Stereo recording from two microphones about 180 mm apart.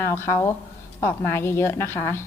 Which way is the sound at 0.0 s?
15° left (ahead or behind).